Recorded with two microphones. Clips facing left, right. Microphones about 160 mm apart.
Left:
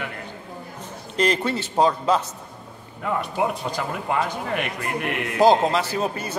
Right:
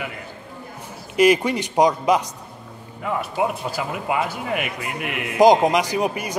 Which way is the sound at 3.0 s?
5° right (ahead or behind).